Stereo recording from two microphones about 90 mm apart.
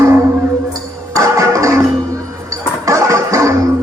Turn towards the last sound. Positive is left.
turn(degrees=-35)  # may be behind; listen again after turning